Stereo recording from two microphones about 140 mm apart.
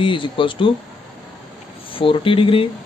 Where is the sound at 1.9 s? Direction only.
40° left (ahead or behind).